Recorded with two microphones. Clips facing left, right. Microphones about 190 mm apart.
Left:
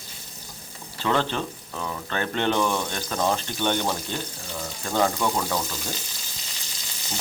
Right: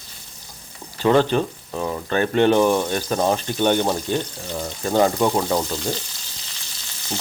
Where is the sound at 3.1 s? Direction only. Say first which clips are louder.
Right 4 dB; 25° right (ahead or behind).